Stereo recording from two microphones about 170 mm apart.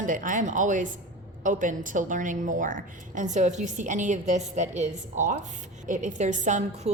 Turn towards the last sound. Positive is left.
turn(degrees=-45)  # may be behind; listen again after turning